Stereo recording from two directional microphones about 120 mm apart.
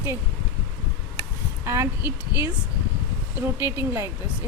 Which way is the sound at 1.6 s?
25° right (ahead or behind).